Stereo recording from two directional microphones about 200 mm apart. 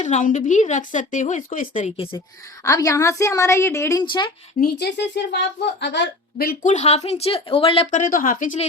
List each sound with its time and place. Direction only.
0.0 s speech: 40° left (ahead or behind)
2.6 s a woman's voice: 15° left (ahead or behind)
4.6 s speech: 55° left (ahead or behind)
6.3 s speech: 45° left (ahead or behind)